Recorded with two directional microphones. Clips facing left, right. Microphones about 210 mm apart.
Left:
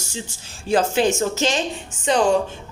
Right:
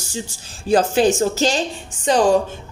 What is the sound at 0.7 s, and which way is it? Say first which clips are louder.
Speech: right 3 dB; 35° right (ahead or behind).